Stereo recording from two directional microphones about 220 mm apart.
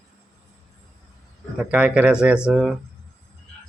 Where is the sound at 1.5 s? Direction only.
5° right (ahead or behind).